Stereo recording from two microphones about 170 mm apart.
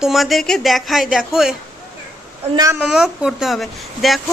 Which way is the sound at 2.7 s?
5° right (ahead or behind).